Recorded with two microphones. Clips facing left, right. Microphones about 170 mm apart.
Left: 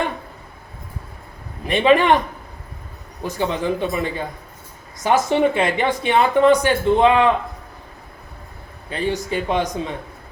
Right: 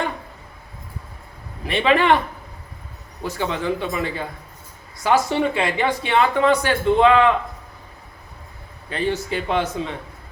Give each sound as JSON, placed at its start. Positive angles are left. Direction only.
{"t": 1.6, "sound": "a man's voice", "side_deg": 15}
{"t": 3.2, "sound": "a man's voice", "side_deg": 20}
{"t": 8.9, "sound": "a man's voice", "side_deg": 15}